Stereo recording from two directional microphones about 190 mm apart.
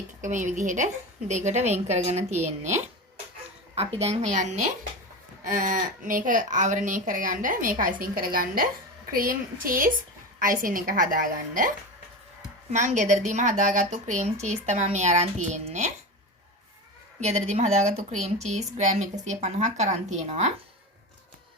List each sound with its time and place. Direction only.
0.2 s a woman's voice: 40° right (ahead or behind)
12.7 s a woman's voice: 40° right (ahead or behind)
17.2 s a woman's voice: 35° right (ahead or behind)